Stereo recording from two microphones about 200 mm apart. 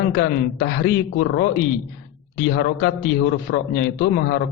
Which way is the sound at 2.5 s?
65° left (ahead or behind).